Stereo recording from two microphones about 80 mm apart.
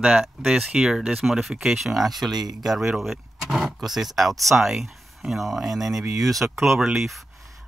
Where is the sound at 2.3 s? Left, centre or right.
Right.